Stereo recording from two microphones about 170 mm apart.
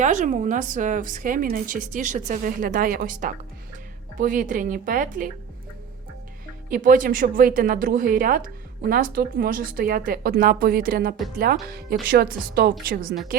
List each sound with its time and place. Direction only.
0.0 s a woman's voice: 45° right (ahead or behind)
6.7 s speech: 55° right (ahead or behind)